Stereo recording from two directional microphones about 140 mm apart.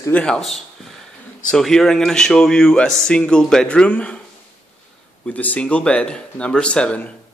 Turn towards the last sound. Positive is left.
turn(degrees=10)  # may be behind; listen again after turning